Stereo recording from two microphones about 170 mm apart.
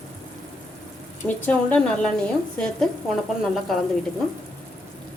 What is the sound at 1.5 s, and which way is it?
A woman's voice, 5° left (ahead or behind).